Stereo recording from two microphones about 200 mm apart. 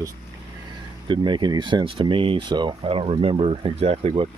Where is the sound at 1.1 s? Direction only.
25° right (ahead or behind).